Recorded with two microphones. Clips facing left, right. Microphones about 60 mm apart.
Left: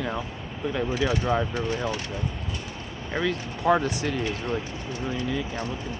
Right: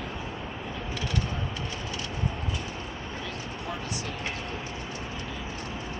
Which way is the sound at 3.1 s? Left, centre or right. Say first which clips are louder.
Left 8 dB; left.